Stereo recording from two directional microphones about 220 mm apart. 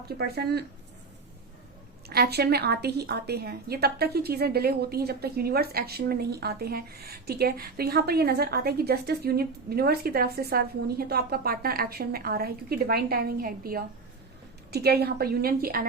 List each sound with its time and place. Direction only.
0.2 s a woman's voice: 45° right (ahead or behind)
2.0 s a woman's voice: 45° right (ahead or behind)